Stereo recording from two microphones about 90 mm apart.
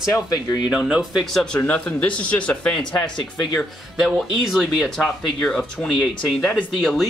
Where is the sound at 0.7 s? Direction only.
10° right (ahead or behind).